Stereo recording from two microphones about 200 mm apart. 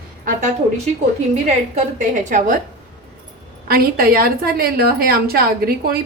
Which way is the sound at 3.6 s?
50° right (ahead or behind).